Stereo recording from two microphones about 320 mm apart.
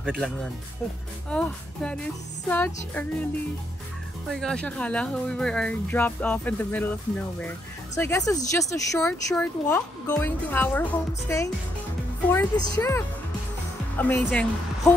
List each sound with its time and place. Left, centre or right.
0.0 s speech: centre
1.3 s speech: centre
4.3 s speech: centre